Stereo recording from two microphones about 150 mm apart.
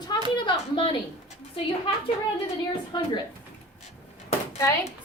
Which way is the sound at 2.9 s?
30° left (ahead or behind).